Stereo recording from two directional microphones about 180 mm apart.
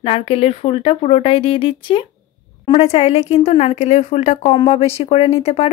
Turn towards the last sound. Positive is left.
turn(degrees=35)  # may be behind; listen again after turning